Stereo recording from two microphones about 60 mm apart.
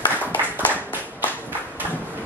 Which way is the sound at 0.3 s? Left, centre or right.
Left.